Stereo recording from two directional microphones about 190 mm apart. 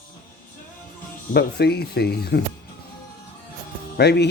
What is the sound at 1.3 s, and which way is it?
Speech, 55° left (ahead or behind).